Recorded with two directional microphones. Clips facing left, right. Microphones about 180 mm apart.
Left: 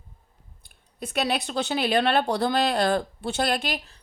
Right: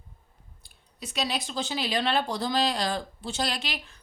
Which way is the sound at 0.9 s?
55° left (ahead or behind).